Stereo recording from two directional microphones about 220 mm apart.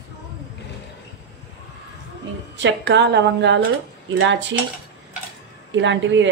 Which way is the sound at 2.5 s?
55° right (ahead or behind).